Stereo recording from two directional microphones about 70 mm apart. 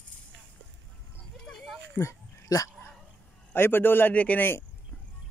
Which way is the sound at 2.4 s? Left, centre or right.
Left.